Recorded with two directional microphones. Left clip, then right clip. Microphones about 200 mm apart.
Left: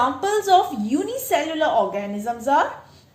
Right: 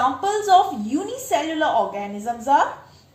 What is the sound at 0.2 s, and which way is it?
A woman's voice, 40° left (ahead or behind).